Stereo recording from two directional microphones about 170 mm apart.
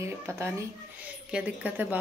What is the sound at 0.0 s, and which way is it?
Speech, 15° right (ahead or behind).